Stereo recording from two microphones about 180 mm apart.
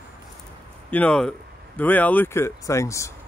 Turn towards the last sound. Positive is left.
turn(degrees=15)  # may be behind; listen again after turning